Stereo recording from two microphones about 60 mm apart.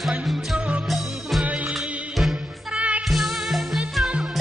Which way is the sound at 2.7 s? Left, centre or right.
Right.